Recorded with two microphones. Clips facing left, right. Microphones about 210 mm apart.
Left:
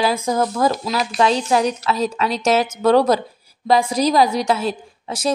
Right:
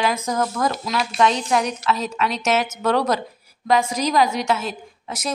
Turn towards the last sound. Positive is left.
turn(degrees=30)  # may be behind; listen again after turning